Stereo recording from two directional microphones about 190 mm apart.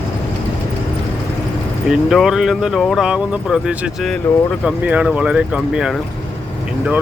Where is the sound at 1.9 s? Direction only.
Centre (ahead or behind).